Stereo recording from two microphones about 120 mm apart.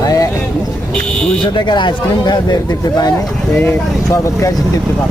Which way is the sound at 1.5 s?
40° left (ahead or behind).